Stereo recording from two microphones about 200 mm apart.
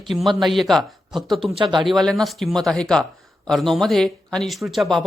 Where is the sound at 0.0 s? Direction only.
Centre (ahead or behind).